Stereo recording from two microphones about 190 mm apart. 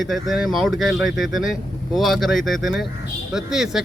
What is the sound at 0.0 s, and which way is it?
Speech, centre (ahead or behind).